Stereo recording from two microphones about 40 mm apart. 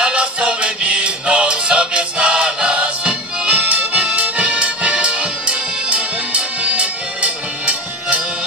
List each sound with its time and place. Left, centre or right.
0.0 s music: right